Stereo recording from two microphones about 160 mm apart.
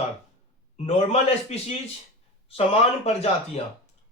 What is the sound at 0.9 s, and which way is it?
Speech, 40° left (ahead or behind).